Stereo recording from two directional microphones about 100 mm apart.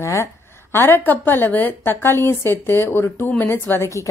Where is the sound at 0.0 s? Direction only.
30° left (ahead or behind).